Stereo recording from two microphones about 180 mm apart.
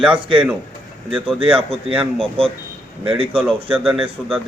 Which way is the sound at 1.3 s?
30° right (ahead or behind).